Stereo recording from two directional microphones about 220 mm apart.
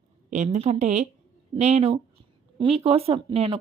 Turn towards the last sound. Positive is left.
turn(degrees=-25)  # may be behind; listen again after turning